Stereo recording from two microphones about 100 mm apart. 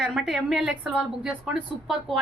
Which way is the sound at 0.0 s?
5° right (ahead or behind).